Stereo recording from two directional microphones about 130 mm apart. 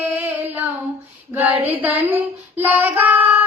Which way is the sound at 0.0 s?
15° right (ahead or behind).